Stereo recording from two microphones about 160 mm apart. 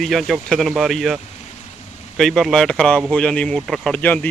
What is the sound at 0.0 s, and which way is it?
A man's voice, centre (ahead or behind).